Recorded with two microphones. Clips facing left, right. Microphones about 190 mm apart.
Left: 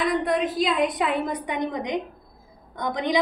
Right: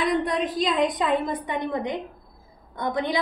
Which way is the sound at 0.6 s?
5° left (ahead or behind).